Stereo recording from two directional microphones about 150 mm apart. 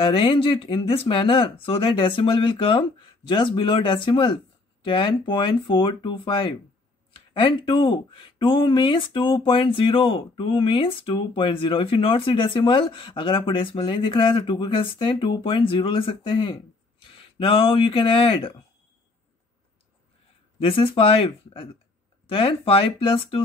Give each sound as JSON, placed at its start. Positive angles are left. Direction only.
{"t": 0.0, "sound": "speech", "side_deg": 35}
{"t": 20.6, "sound": "speech", "side_deg": 35}